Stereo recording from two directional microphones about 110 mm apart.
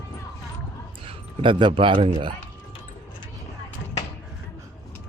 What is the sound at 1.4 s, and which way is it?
Speech, 50° right (ahead or behind).